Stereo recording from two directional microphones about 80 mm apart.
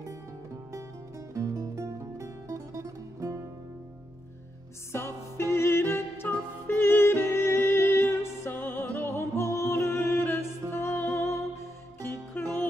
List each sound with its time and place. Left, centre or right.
1.3 s music: right
4.9 s music: left
9.1 s music: left
12.4 s music: left